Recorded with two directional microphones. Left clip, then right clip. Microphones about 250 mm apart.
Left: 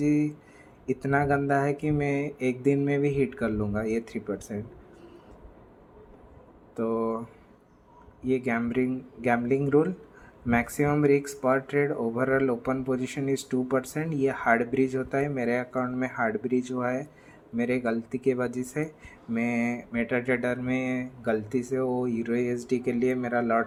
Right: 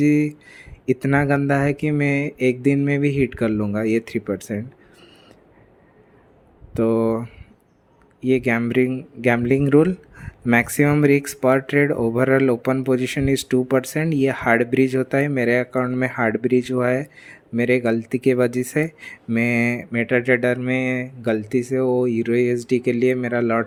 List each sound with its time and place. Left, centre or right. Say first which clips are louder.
0.0 s speech: right 7 dB; right
1.2 s speech: right 5 dB; right
3.8 s speech: right 8 dB; right
6.7 s speech: right 9 dB; right
8.4 s speech: right 9 dB; right
13.3 s speech: right 7 dB; right
14.3 s speech: right 5 dB; right
16.0 s speech: right 8 dB; right
16.8 s speech: right 9 dB; right
17.9 s speech: right 8 dB; right
19.4 s speech: right 9 dB; right